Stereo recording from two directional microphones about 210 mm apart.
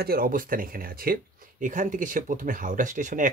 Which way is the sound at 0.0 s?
45° right (ahead or behind).